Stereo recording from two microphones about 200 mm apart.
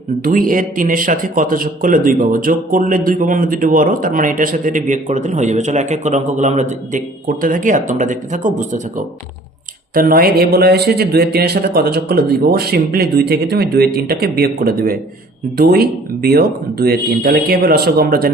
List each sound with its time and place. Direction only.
0.2 s speech: 45° right (ahead or behind)